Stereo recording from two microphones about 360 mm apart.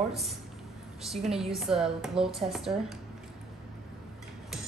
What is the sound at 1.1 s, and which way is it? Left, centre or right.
A woman's voice, centre.